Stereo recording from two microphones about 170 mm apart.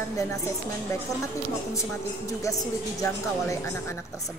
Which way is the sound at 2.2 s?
20° left (ahead or behind).